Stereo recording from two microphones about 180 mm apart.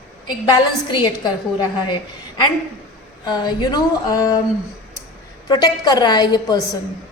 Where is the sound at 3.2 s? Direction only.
25° left (ahead or behind).